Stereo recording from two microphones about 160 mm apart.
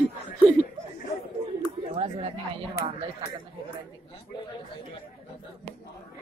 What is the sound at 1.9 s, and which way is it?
Speech, 40° right (ahead or behind).